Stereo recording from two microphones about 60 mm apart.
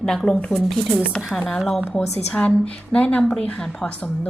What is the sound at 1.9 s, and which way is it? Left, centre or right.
A woman's voice, centre.